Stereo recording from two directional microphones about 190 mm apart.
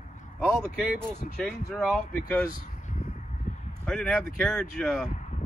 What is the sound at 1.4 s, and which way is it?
Speech, centre (ahead or behind).